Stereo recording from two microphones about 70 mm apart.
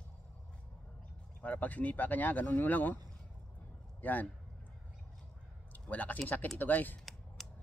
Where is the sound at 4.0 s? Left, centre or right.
Left.